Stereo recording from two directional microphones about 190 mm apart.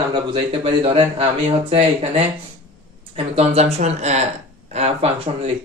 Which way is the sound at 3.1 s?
30° right (ahead or behind).